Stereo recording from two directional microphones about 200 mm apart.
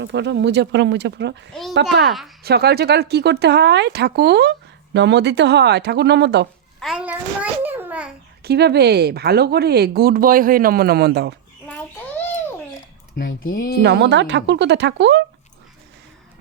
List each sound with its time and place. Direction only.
0.0 s speech: 60° right (ahead or behind)
2.0 s a woman's voice: centre (ahead or behind)
2.4 s speech: 55° right (ahead or behind)
6.7 s a child's voice: centre (ahead or behind)
7.6 s a sound: 10° right (ahead or behind)
8.4 s speech: 55° right (ahead or behind)
13.1 s speech: 45° left (ahead or behind)
13.8 s speech: 60° right (ahead or behind)